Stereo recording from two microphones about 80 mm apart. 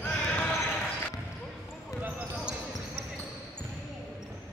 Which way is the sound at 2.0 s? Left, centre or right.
Centre.